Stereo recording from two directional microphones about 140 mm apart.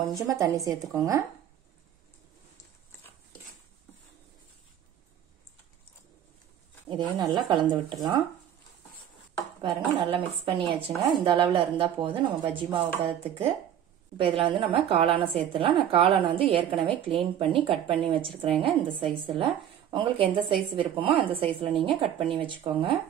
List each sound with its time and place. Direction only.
0.1 s a woman's voice: 25° right (ahead or behind)
6.9 s a woman's voice: 30° right (ahead or behind)
9.6 s a woman's voice: 40° right (ahead or behind)